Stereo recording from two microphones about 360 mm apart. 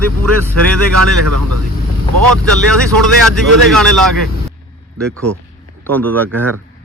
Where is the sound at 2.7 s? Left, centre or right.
Centre.